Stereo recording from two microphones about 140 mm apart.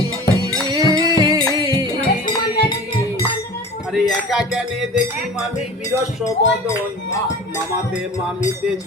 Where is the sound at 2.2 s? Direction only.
30° left (ahead or behind).